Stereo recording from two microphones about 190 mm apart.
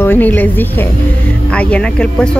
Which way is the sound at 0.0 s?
10° left (ahead or behind).